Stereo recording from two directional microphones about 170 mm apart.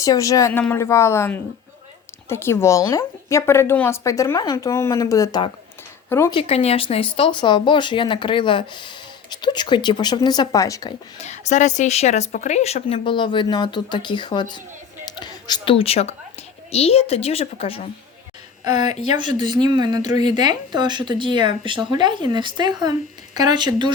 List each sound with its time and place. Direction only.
0.0 s a woman's voice: 20° left (ahead or behind)
6.3 s speech: 35° left (ahead or behind); by 10.9 s 20° left (ahead or behind)
11.2 s a woman's voice: 45° left (ahead or behind)
18.9 s a woman's voice: 40° left (ahead or behind)
19.1 s speech: 25° right (ahead or behind)